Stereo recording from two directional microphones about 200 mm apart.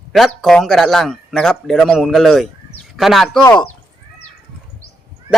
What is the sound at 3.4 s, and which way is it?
Speech, 15° left (ahead or behind).